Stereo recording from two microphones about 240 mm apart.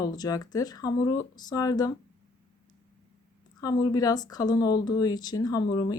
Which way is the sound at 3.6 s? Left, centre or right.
Centre.